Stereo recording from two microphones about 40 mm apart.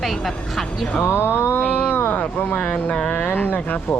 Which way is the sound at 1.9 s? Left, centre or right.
Left.